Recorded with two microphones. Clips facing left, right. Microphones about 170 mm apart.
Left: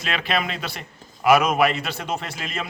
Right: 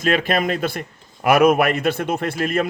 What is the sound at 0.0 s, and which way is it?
A man's voice, 50° right (ahead or behind).